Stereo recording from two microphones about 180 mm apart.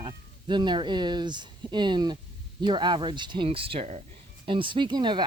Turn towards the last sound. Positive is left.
turn(degrees=-25)  # may be behind; listen again after turning